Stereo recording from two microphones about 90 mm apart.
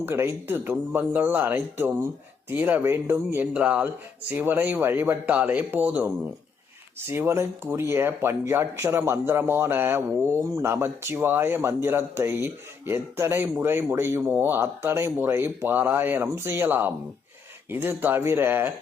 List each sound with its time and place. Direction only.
0.0 s speech: 25° right (ahead or behind)
3.4 s speech: 15° right (ahead or behind)